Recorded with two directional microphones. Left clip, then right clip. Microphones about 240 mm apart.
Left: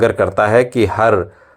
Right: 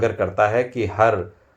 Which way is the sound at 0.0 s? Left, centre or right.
Left.